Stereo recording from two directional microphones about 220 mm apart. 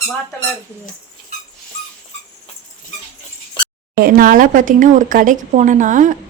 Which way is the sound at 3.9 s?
40° right (ahead or behind).